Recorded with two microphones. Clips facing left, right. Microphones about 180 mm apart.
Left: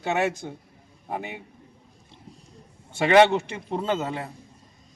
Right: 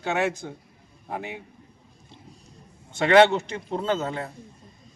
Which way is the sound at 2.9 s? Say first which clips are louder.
Even; 10° left (ahead or behind).